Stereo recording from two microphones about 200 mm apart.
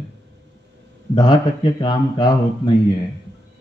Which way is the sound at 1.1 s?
20° left (ahead or behind).